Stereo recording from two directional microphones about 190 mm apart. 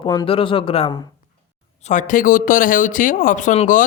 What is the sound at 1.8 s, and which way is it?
Speech, 40° left (ahead or behind).